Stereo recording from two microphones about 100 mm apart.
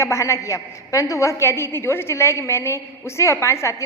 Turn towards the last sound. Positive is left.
turn(degrees=30)  # may be behind; listen again after turning